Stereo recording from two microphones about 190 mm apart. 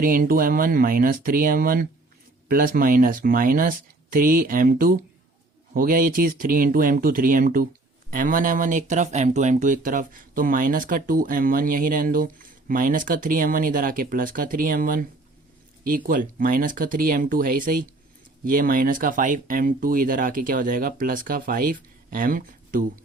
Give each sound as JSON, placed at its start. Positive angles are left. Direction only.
{"t": 0.0, "sound": "speech", "side_deg": -50}